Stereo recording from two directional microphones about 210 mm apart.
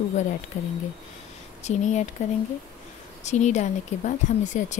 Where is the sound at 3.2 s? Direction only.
35° left (ahead or behind).